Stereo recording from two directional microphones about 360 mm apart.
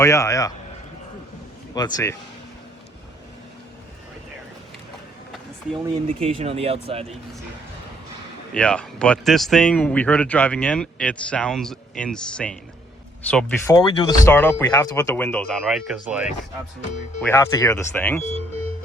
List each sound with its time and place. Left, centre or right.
0.0 s speech: centre
1.7 s speech: centre
5.8 s speech: centre
8.5 s speech: centre
17.2 s speech: centre